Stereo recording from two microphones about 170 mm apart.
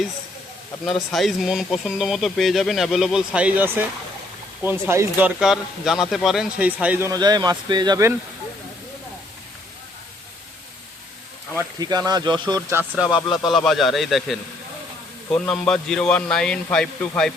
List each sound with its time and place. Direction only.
0.9 s speech: centre (ahead or behind); by 8.1 s 20° right (ahead or behind)
11.5 s speech: 25° right (ahead or behind)
13.0 s speech: 5° right (ahead or behind)
15.4 s speech: 5° left (ahead or behind)